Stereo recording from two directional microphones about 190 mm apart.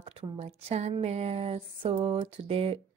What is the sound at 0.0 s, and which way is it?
A woman's voice, 30° right (ahead or behind).